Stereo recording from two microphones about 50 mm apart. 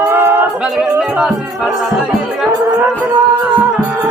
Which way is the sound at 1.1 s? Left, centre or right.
Right.